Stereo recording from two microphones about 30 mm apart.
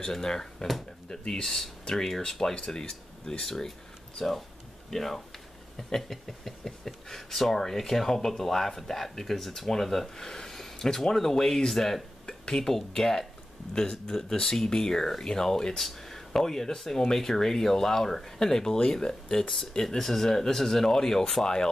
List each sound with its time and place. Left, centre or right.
0.0 s speech: centre
1.4 s speech: centre
2.5 s speech: left
11.7 s speech: centre
12.3 s a sound: left
12.7 s speech: centre
15.8 s speech: centre
20.1 s speech: centre